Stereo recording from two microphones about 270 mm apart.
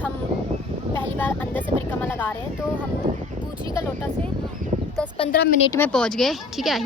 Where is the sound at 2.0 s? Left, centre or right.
Centre.